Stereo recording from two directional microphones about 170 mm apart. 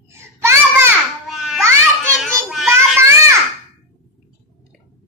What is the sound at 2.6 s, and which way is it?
Child singing, 15° right (ahead or behind).